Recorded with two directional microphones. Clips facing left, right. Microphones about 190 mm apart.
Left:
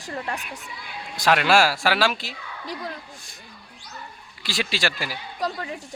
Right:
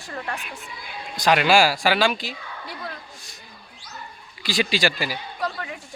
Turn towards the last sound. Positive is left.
turn(degrees=30)  # may be behind; listen again after turning